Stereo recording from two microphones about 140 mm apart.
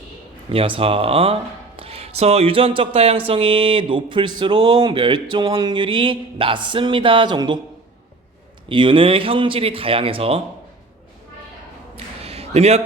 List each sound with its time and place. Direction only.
0.5 s speech: 40° right (ahead or behind)
8.7 s speech: 35° right (ahead or behind)
11.9 s a sound: 45° right (ahead or behind)